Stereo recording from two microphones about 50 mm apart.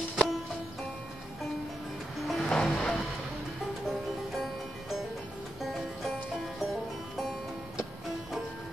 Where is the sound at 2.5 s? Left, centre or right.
Centre.